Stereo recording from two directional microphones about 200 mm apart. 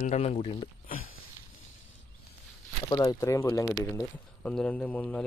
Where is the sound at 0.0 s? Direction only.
30° left (ahead or behind).